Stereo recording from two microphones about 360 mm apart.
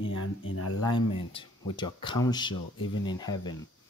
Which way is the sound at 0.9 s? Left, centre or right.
Centre.